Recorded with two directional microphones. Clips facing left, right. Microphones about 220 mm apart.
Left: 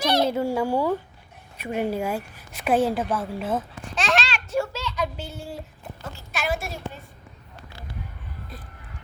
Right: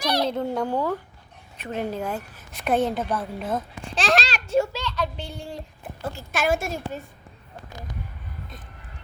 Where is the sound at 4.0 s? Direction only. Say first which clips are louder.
Right 2 dB; 35° right (ahead or behind).